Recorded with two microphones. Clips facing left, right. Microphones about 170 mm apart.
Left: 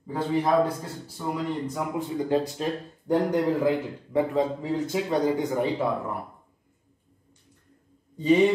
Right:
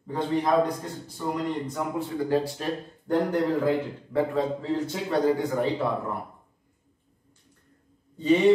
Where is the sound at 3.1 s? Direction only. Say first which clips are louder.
Left 1 dB; 15° left (ahead or behind).